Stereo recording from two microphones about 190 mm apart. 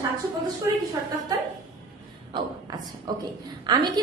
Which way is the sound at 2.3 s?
20° right (ahead or behind).